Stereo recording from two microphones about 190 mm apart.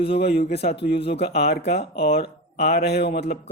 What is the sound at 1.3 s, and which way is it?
Speech, 60° left (ahead or behind).